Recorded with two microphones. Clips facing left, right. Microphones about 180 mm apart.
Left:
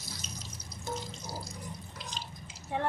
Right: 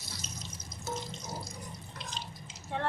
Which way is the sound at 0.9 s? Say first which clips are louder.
Even; centre (ahead or behind).